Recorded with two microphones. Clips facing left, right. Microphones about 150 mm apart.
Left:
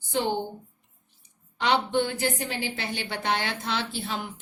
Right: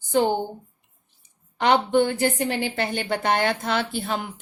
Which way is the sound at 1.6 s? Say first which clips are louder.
Right 5 dB; 50° right (ahead or behind).